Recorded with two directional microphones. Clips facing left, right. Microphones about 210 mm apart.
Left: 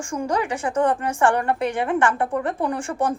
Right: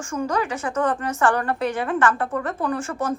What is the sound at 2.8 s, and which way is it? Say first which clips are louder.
Speech: left 2 dB; 30° left (ahead or behind).